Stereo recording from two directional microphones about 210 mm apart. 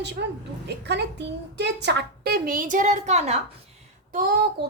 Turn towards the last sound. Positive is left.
turn(degrees=-50)  # may be behind; listen again after turning